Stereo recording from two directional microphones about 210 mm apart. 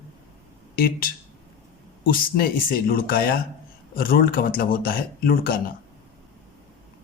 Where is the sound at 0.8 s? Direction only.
45° left (ahead or behind).